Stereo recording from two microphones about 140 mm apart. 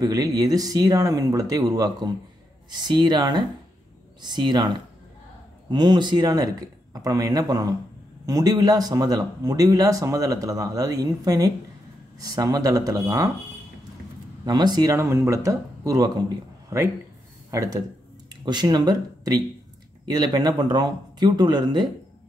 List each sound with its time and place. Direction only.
0.0 s speech: 25° right (ahead or behind)
14.4 s speech: 30° right (ahead or behind)